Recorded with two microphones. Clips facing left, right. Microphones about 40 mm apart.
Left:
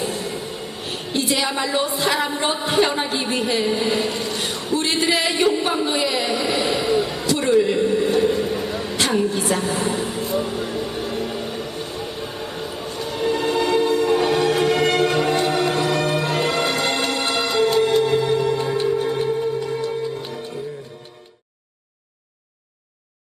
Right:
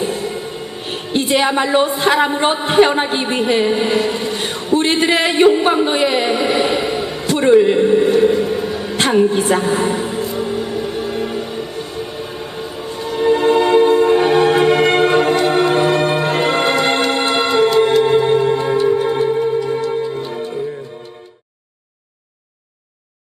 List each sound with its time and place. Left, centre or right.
0.0 s a woman's voice: right
8.5 s a sound: right
12.5 s train: right
12.8 s music: right